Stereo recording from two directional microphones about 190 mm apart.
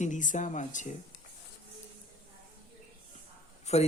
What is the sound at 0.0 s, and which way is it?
Speech, 40° left (ahead or behind).